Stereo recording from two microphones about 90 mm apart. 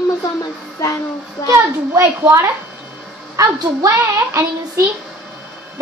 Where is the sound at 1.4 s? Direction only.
35° left (ahead or behind).